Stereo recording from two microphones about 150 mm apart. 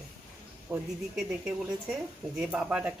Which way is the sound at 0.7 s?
15° right (ahead or behind).